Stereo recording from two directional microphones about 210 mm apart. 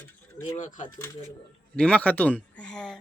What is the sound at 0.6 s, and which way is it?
Speech, 40° left (ahead or behind).